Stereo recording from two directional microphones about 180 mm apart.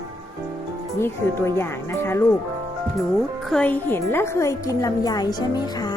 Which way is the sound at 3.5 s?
5° left (ahead or behind).